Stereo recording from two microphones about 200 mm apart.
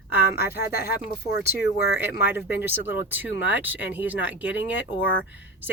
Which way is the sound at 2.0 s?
10° right (ahead or behind).